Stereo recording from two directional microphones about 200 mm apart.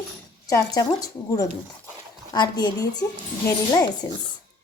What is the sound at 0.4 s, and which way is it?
Speech, 15° left (ahead or behind).